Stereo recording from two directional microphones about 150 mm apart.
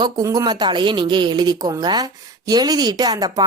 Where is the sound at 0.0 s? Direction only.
25° right (ahead or behind).